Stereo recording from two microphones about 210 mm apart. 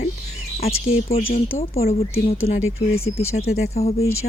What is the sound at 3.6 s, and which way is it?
Speech, 30° left (ahead or behind).